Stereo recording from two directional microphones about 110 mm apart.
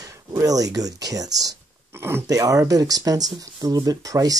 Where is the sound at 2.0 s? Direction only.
20° right (ahead or behind).